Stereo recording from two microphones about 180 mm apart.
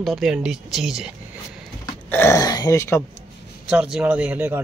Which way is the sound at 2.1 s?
15° left (ahead or behind).